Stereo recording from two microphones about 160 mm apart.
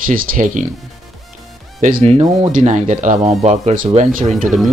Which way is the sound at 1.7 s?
55° right (ahead or behind).